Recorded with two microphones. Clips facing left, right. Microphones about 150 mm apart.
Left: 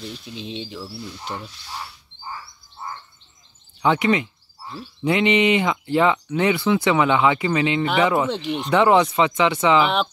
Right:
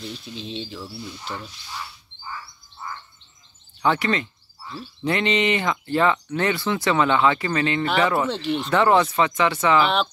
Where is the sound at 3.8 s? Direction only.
15° left (ahead or behind).